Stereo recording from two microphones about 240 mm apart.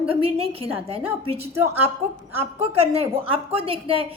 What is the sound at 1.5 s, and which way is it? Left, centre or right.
Speech, centre.